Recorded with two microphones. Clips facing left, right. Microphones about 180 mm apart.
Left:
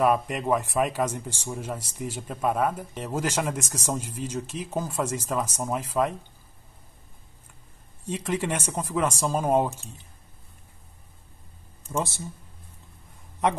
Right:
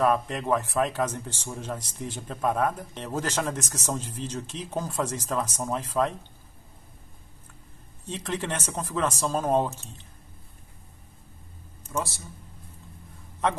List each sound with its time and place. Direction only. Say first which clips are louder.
0.0 s a man's voice: left 1 dB; 10° left (ahead or behind)
8.1 s a man's voice: left 3 dB; 10° left (ahead or behind)
11.9 s speech: left 2 dB; 25° left (ahead or behind)